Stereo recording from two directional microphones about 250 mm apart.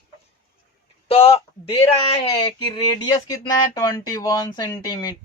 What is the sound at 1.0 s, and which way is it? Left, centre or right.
Speech, left.